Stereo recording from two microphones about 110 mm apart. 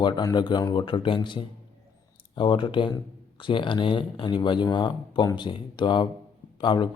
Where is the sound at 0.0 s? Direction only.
35° left (ahead or behind).